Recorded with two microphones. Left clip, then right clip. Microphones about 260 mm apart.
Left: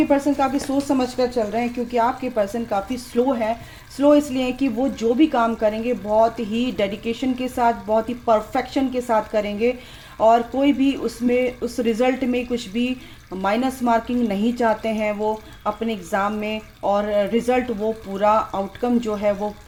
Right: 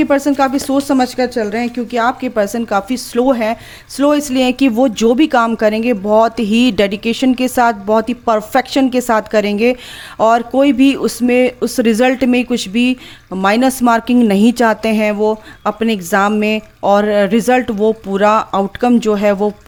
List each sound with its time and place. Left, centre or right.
0.0 s speech: right